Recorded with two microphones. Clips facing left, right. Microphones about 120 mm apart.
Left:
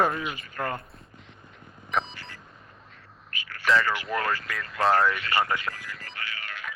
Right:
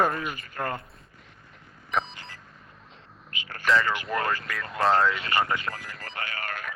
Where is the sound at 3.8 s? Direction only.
20° right (ahead or behind).